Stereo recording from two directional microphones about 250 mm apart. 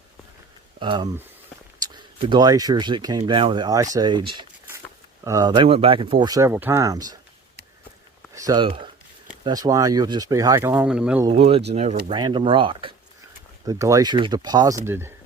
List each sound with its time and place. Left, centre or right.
0.8 s speech: centre
8.4 s speech: centre
11.3 s speech: right